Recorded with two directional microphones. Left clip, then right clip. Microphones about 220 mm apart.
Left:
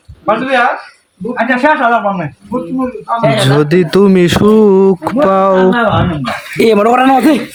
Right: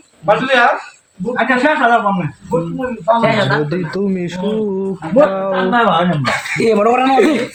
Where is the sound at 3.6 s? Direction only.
35° left (ahead or behind).